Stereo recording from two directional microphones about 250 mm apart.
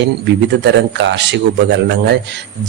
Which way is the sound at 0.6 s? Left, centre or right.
Right.